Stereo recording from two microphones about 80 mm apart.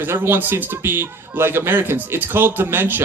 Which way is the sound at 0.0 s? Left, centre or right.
Right.